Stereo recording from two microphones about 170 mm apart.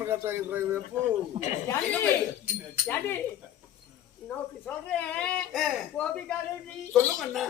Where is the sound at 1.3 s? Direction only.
40° right (ahead or behind).